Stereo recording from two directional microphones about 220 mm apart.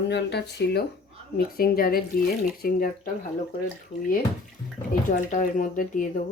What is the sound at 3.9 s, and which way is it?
Speech, 25° left (ahead or behind).